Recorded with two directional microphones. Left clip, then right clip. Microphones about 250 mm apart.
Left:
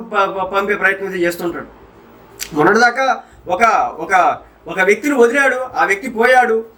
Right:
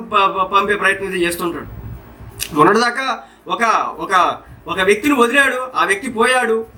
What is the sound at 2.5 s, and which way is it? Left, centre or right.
A man's voice, centre.